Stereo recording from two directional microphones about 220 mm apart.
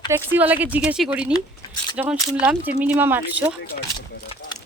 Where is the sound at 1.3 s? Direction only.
20° left (ahead or behind).